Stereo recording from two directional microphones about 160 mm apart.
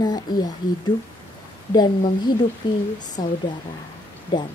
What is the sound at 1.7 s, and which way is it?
A woman's voice, 25° left (ahead or behind).